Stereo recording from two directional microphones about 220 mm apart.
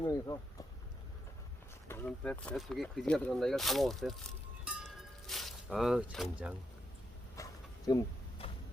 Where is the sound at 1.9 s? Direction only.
5° left (ahead or behind).